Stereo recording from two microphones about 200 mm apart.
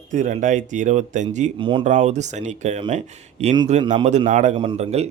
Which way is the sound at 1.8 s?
35° right (ahead or behind).